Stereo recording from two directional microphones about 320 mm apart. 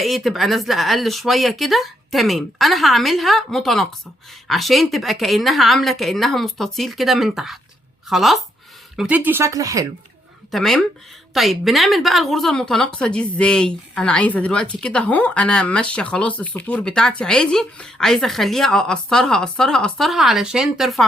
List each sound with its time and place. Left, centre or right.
0.0 s a woman's voice: centre
10.5 s a woman's voice: centre